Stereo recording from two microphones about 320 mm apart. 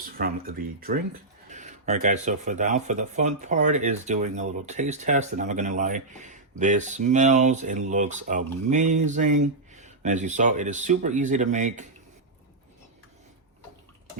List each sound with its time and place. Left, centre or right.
0.0 s speech: right